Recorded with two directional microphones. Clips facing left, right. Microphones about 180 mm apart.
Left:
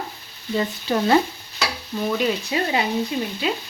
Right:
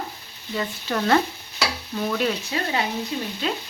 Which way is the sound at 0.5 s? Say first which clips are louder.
Left 4 dB; 20° left (ahead or behind).